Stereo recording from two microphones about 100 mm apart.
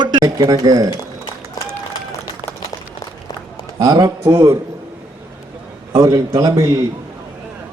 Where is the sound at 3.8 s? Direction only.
40° right (ahead or behind).